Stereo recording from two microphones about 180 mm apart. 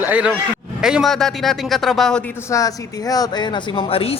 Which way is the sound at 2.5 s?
20° left (ahead or behind).